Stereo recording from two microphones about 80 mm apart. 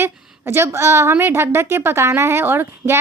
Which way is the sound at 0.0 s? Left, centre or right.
Right.